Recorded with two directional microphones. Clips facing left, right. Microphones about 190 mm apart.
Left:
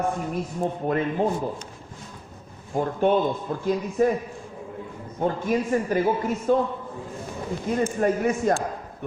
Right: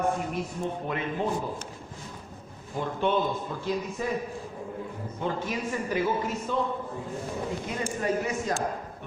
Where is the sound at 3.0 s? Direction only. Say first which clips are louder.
Left 5 dB; 50° left (ahead or behind).